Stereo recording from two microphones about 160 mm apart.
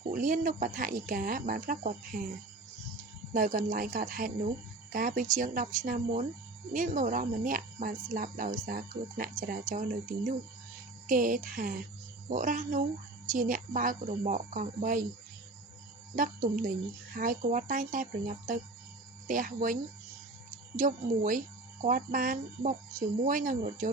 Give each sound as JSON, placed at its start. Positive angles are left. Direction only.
{"t": 0.1, "sound": "speech", "side_deg": -55}
{"t": 3.3, "sound": "speech", "side_deg": -60}
{"t": 16.1, "sound": "speech", "side_deg": -55}